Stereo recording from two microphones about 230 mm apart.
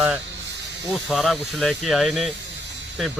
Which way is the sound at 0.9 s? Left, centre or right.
Centre.